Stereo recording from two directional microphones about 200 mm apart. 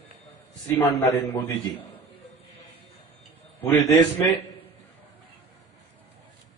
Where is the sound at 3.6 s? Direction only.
20° left (ahead or behind).